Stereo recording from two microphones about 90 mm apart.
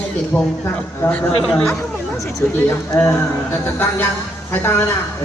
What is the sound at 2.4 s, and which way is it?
Speech, 20° left (ahead or behind).